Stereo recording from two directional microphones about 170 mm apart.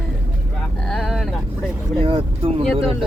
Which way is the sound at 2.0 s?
35° right (ahead or behind).